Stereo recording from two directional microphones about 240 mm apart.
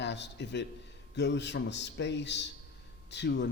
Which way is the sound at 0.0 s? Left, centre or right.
Left.